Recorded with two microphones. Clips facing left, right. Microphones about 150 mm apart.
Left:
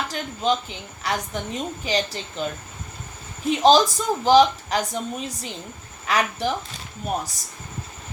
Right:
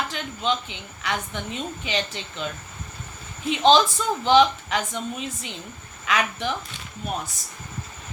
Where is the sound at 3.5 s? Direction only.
40° left (ahead or behind).